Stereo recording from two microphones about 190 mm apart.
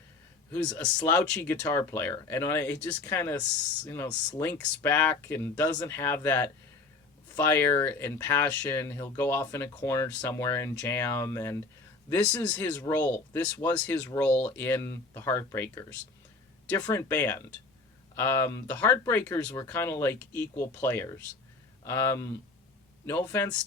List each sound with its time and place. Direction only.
0.5 s speech: 5° left (ahead or behind)